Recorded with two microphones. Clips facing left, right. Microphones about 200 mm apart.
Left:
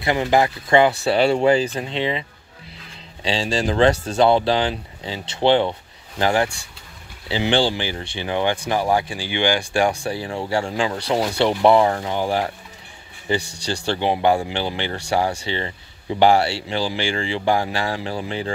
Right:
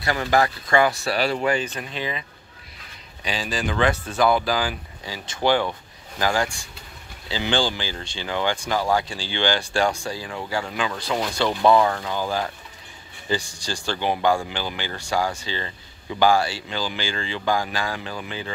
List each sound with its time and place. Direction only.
0.0 s speech: 20° left (ahead or behind)
3.3 s speech: 30° left (ahead or behind)
13.4 s speech: 65° left (ahead or behind)
13.8 s speech: 25° left (ahead or behind)